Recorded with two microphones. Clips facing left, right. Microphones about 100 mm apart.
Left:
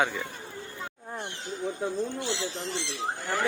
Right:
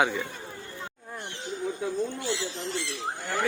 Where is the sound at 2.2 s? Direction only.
20° left (ahead or behind).